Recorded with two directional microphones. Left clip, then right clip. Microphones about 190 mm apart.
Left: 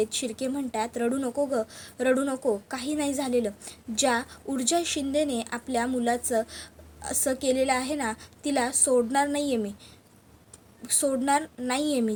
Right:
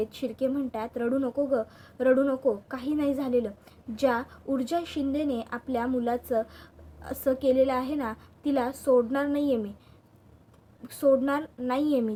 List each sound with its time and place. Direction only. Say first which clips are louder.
0.0 s speech: left 1 dB; 30° left (ahead or behind)
10.8 s speech: right 2 dB; 30° left (ahead or behind)